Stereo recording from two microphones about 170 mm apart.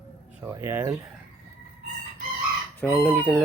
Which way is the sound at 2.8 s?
10° left (ahead or behind).